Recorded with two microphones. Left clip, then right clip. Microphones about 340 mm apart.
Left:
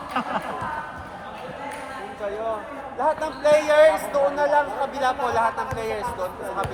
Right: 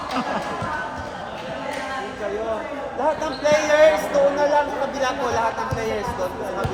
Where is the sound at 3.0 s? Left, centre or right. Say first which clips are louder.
Even; left.